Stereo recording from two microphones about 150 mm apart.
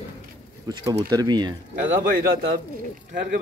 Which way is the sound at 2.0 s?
80° right.